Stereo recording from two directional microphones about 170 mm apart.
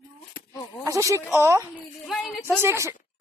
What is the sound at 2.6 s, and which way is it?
Speech, 15° right (ahead or behind).